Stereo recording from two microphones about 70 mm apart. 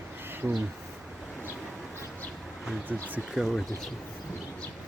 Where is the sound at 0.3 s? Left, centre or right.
Right.